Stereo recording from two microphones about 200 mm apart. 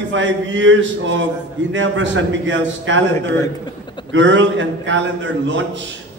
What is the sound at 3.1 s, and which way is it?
Speech, 10° left (ahead or behind).